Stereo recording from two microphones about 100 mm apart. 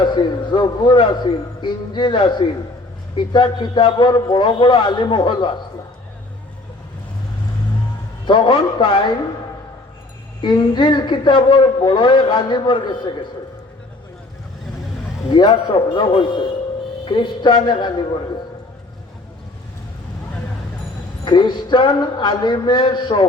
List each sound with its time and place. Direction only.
0.0 s speech: 50° left (ahead or behind)
8.3 s a man's voice: 55° left (ahead or behind)
10.4 s speech: 50° left (ahead or behind)
15.3 s a man's voice: 50° left (ahead or behind)
21.2 s speech: 50° left (ahead or behind)